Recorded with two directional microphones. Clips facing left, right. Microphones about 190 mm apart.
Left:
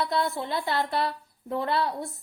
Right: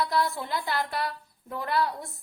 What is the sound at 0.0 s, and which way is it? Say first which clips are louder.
A woman's voice: even; 25° left (ahead or behind).